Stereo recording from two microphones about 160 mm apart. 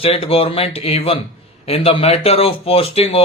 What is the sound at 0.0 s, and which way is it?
A man's voice, 35° left (ahead or behind).